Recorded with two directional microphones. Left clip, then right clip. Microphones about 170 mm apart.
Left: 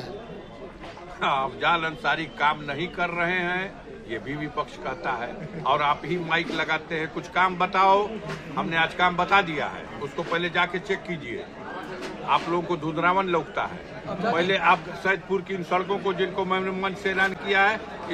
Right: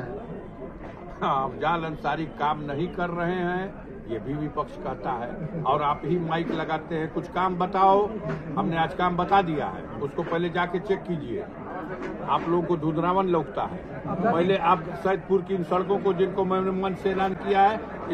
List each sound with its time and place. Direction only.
1.2 s a man's voice: 45° left (ahead or behind); by 11.0 s 30° left (ahead or behind)
12.3 s a man's voice: 25° left (ahead or behind)